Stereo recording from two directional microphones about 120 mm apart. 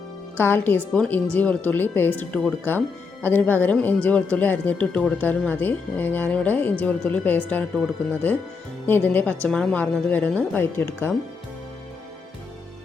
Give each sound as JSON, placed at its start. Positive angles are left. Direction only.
{"t": 0.3, "sound": "speech", "side_deg": 15}